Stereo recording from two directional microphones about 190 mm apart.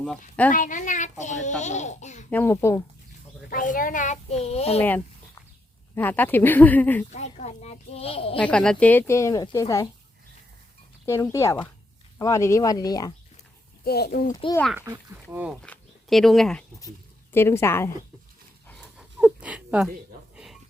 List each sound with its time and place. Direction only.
0.5 s a child's voice: 45° left (ahead or behind)
2.3 s speech: 10° left (ahead or behind)
3.5 s a child's voice: 45° left (ahead or behind)
5.9 s speech: 10° left (ahead or behind)
7.1 s a child's voice: 35° left (ahead or behind)
8.4 s speech: 5° left (ahead or behind)
11.0 s speech: 15° left (ahead or behind)
13.8 s a child's voice: 55° left (ahead or behind)
14.3 s speech: 20° left (ahead or behind)
14.8 s speech: 10° right (ahead or behind)
15.6 s speech: 5° left (ahead or behind)
17.3 s speech: 15° left (ahead or behind)
18.7 s a sound: centre (ahead or behind)